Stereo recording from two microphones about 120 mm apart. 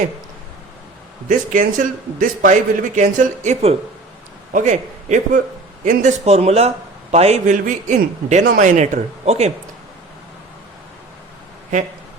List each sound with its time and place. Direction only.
1.3 s a man's voice: 90° right; by 3.8 s 65° right (ahead or behind)
4.5 s a man's voice: 90° right; by 9.5 s 65° right (ahead or behind)